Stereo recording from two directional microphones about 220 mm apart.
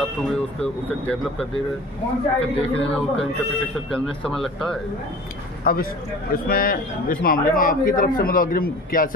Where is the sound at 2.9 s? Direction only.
Centre (ahead or behind).